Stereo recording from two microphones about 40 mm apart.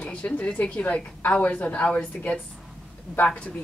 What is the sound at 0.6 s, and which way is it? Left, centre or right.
A woman's voice, left.